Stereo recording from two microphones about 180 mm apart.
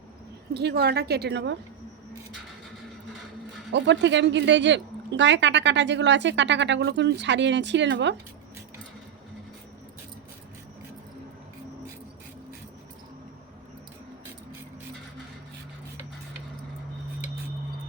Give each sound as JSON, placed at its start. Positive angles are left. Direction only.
{"t": 0.5, "sound": "a woman's voice", "side_deg": -65}
{"t": 3.7, "sound": "speech", "side_deg": -75}